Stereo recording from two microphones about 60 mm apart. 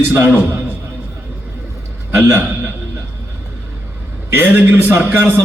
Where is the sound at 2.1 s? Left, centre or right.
Right.